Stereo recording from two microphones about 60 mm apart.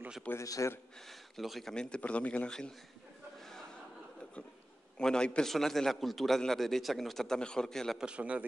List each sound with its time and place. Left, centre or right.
0.4 s a man's voice: left
1.3 s a man's voice: centre
1.7 s a man's voice: centre
4.9 s a man's voice: centre
8.0 s a man's voice: centre